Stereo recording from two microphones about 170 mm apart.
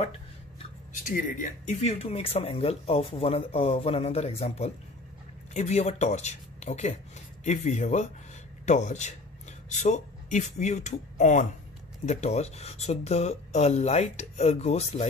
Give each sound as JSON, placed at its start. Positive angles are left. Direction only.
{"t": 1.0, "sound": "speech", "side_deg": 50}